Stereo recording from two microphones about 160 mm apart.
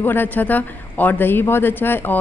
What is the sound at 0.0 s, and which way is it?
A woman's voice, 10° left (ahead or behind).